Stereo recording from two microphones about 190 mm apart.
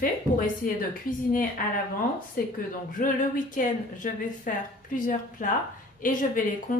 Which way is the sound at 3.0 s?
45° left (ahead or behind).